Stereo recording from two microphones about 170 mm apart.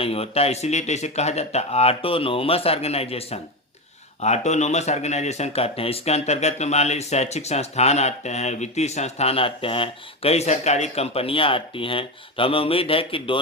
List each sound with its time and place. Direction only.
0.0 s speech: 35° left (ahead or behind)